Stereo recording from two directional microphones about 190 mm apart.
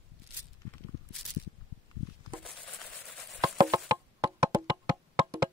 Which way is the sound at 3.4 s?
20° right (ahead or behind).